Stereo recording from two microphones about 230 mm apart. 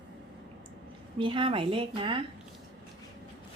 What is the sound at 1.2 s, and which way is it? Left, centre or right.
Speech, right.